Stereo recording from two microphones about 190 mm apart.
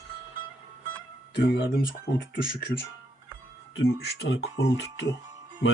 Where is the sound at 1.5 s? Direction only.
50° left (ahead or behind).